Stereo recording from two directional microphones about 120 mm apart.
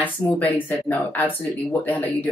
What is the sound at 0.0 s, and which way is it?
Speech, 15° left (ahead or behind).